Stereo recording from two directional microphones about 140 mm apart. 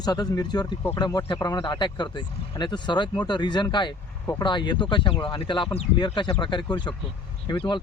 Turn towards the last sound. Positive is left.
turn(degrees=35)  # may be behind; listen again after turning